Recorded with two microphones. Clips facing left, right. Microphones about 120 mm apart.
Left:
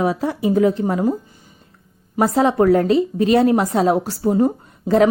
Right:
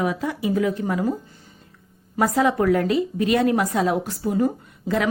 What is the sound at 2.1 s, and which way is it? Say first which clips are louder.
A woman's voice: left 4 dB; 30° left (ahead or behind).